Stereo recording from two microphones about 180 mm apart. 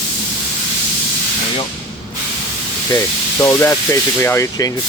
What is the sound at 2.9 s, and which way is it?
Speech, 15° left (ahead or behind).